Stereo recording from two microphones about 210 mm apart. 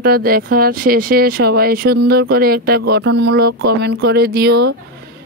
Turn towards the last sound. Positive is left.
turn(degrees=-50)  # may be behind; listen again after turning